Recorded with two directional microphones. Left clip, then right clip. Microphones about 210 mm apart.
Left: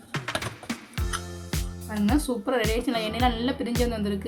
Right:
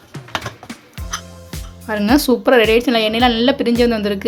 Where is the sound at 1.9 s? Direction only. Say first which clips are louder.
Right 12 dB; 40° right (ahead or behind).